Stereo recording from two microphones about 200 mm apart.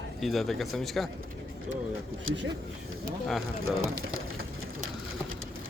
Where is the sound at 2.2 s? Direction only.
65° right (ahead or behind).